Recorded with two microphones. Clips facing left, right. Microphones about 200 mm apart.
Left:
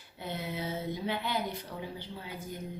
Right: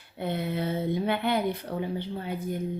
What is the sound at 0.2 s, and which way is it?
A woman's voice, 60° right (ahead or behind).